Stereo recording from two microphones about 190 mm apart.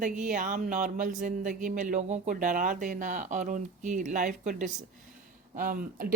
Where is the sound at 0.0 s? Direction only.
40° right (ahead or behind).